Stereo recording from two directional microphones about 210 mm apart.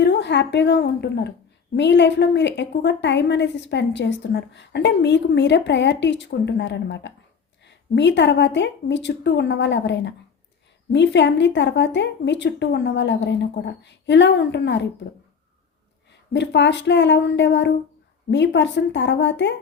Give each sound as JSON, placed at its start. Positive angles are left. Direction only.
{"t": 0.0, "sound": "a woman's voice", "side_deg": 55}
{"t": 16.3, "sound": "a woman's voice", "side_deg": 55}